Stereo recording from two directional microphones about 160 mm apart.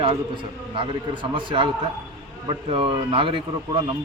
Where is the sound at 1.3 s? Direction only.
30° right (ahead or behind).